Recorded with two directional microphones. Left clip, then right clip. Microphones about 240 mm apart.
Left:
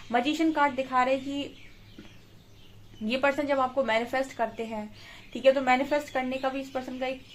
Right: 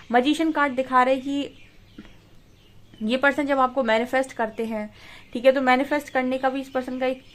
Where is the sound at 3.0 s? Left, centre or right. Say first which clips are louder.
Right 5 dB; right.